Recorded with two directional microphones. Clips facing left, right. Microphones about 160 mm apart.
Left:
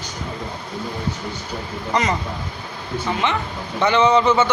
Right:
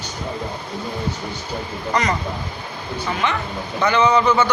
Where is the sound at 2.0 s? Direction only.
25° left (ahead or behind).